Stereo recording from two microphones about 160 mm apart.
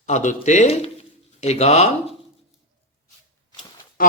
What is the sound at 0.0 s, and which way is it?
A man's voice, 50° left (ahead or behind).